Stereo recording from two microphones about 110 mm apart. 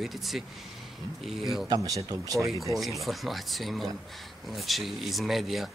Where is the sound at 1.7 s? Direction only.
30° right (ahead or behind).